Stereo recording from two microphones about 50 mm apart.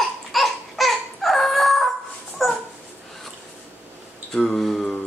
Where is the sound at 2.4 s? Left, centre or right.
Centre.